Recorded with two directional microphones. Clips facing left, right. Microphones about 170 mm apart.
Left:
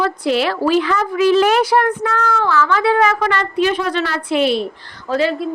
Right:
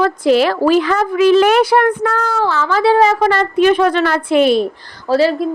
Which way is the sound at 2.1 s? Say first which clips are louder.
Right 1 dB; 35° right (ahead or behind).